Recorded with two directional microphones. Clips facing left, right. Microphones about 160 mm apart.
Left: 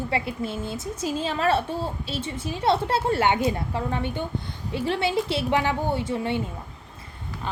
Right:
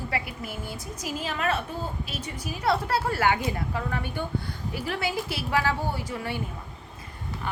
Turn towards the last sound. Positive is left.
turn(degrees=25)  # may be behind; listen again after turning